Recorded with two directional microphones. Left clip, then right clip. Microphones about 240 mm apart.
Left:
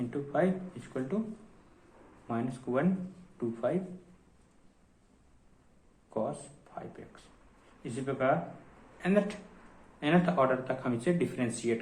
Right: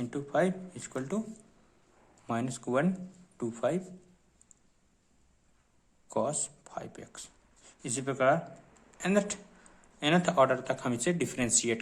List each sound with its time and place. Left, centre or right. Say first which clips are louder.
0.0 s speech: right 1 dB; right
2.2 s speech: right 1 dB; right
6.1 s speech: right 3 dB; right